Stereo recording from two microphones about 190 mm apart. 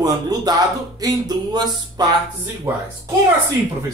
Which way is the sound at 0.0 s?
20° right (ahead or behind).